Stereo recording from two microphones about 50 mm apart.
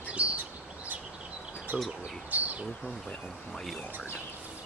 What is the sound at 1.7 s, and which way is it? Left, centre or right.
Speech, right.